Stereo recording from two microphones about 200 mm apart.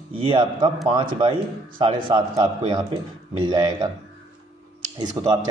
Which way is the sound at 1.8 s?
25° right (ahead or behind).